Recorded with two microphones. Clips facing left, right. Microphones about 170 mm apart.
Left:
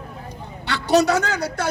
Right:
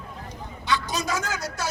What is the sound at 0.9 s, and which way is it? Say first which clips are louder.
Speech: left 11 dB; 70° left (ahead or behind).